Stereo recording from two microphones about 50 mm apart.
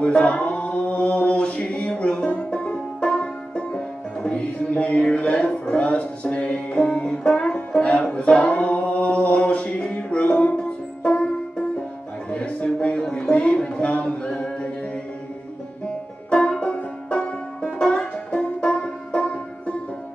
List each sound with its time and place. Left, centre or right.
0.0 s a capella: left
7.0 s music: left
8.1 s singing: left
12.3 s a sound: left
16.3 s music: centre